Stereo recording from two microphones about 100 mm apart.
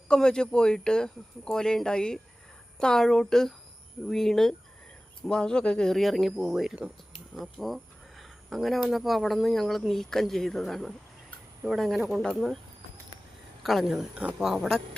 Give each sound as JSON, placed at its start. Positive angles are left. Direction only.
{"t": 0.1, "sound": "speech", "side_deg": 5}
{"t": 13.6, "sound": "speech", "side_deg": 0}
{"t": 14.2, "sound": "speech", "side_deg": -15}